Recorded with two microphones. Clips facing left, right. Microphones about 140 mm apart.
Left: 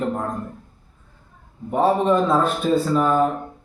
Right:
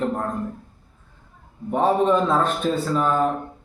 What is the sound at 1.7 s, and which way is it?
A man's voice, 5° left (ahead or behind).